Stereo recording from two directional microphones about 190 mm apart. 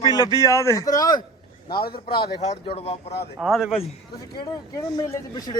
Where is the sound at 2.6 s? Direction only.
30° left (ahead or behind).